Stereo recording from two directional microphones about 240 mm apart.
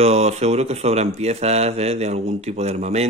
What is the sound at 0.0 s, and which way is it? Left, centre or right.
Speech, right.